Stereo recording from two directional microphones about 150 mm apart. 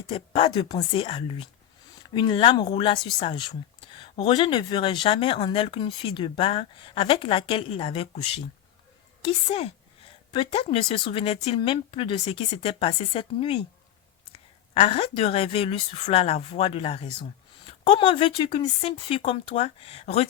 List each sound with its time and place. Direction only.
0.1 s speech: 40° left (ahead or behind)
14.7 s speech: 40° left (ahead or behind)